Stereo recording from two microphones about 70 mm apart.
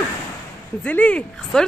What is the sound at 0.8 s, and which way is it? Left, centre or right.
Speech, centre.